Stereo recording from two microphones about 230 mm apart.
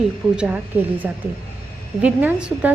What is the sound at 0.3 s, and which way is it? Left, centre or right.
A woman's voice, centre.